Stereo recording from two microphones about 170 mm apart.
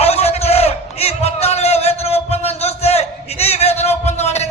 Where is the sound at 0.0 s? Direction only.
35° left (ahead or behind).